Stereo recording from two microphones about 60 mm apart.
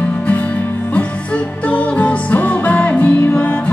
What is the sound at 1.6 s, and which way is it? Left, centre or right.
Music, left.